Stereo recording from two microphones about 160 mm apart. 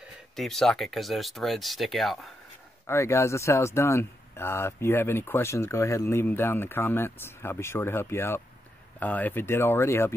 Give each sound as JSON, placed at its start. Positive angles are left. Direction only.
{"t": 0.4, "sound": "speech", "side_deg": 0}
{"t": 2.9, "sound": "speech", "side_deg": 15}